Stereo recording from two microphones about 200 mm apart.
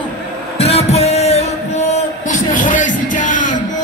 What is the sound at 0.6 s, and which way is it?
Music, 30° left (ahead or behind).